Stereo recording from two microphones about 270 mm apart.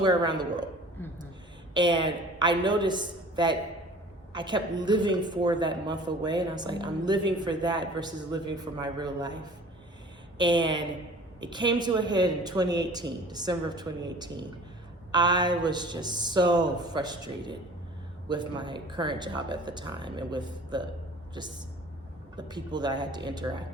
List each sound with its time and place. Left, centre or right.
0.0 s a woman's voice: centre
1.7 s a woman's voice: centre
22.4 s a woman's voice: centre